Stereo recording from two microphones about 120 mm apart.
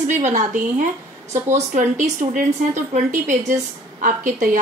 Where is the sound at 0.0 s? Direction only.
90° right.